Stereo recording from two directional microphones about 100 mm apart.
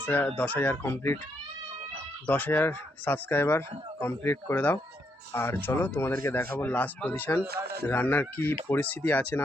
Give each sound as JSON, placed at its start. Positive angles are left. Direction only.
{"t": 0.0, "sound": "speech", "side_deg": 20}
{"t": 2.2, "sound": "speech", "side_deg": 15}